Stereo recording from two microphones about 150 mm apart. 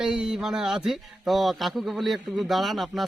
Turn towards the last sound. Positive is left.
turn(degrees=0)  # may be behind; listen again after turning